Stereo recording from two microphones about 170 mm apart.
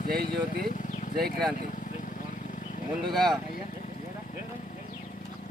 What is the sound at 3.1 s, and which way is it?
Speech, centre (ahead or behind).